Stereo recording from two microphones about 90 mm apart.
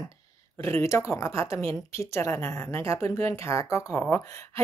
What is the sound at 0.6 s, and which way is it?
Speech, 35° left (ahead or behind).